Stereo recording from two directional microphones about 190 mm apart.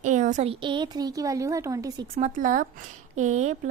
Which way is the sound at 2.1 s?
40° right (ahead or behind).